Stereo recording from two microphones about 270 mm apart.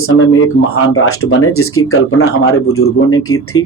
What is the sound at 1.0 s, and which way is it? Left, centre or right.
Speech, left.